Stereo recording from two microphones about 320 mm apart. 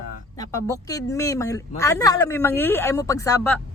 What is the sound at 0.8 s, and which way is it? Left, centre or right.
Speech, centre.